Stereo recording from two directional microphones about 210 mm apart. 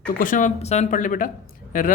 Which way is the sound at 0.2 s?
40° left (ahead or behind).